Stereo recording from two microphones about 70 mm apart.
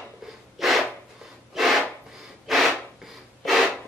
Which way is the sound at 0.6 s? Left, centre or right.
Centre.